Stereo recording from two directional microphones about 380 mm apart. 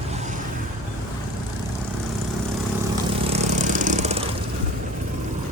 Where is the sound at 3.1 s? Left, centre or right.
Centre.